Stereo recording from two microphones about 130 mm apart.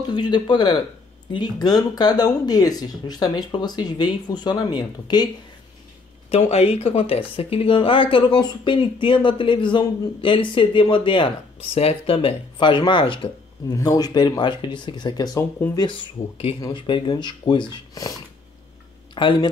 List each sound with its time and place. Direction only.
0.1 s speech: 35° left (ahead or behind)
6.3 s speech: 50° left (ahead or behind)
13.7 s speech: 25° left (ahead or behind)
19.1 s speech: 40° left (ahead or behind)